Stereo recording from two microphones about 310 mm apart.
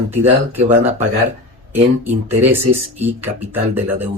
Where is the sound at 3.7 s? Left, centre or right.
Centre.